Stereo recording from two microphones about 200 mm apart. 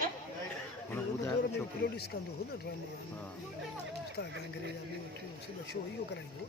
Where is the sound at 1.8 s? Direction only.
55° left (ahead or behind).